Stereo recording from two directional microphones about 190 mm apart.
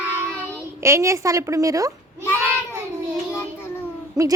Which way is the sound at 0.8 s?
15° right (ahead or behind).